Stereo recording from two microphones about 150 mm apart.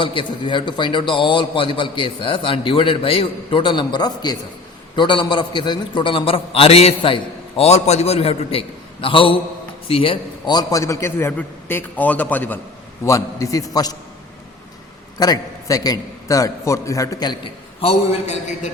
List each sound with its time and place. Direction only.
0.0 s a man's voice: 35° left (ahead or behind); by 12.5 s 10° left (ahead or behind)
13.1 s a man's voice: 20° left (ahead or behind)
15.2 s a man's voice: 25° left (ahead or behind); by 18.7 s 50° left (ahead or behind)